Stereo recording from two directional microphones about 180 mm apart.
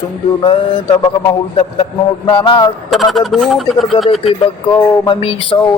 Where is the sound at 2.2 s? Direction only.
25° left (ahead or behind).